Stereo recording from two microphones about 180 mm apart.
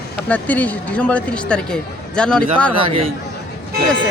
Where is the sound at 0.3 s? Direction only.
10° left (ahead or behind).